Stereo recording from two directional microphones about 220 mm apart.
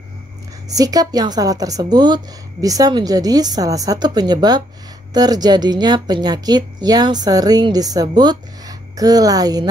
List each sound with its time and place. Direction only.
0.7 s a woman's voice: 15° right (ahead or behind)